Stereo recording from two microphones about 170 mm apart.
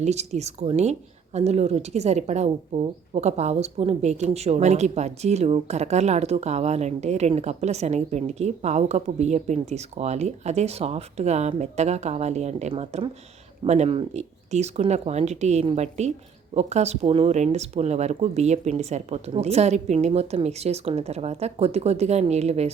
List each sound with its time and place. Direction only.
0.0 s a woman's voice: 40° right (ahead or behind)